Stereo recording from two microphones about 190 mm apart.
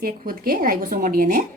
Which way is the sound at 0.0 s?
50° right (ahead or behind).